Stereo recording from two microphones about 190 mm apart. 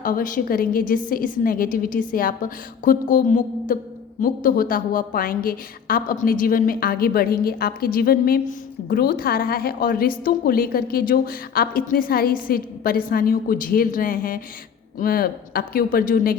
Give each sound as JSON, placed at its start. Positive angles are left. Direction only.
{"t": 0.0, "sound": "a woman's voice", "side_deg": 45}